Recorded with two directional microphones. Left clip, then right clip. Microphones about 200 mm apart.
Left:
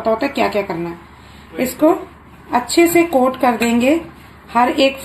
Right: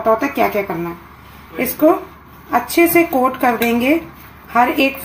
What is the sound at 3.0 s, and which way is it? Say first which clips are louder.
A woman's voice: left 1 dB; 20° left (ahead or behind).